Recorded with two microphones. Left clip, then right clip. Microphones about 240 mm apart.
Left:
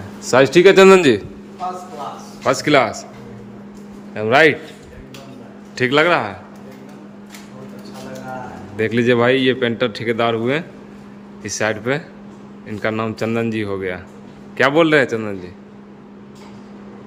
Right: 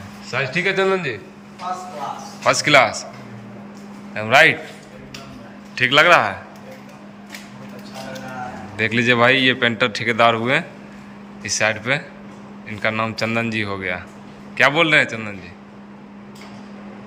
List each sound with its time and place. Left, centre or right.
0.3 s a man's voice: left
2.4 s a man's voice: centre
4.1 s a man's voice: centre
5.7 s a man's voice: centre
8.7 s a man's voice: centre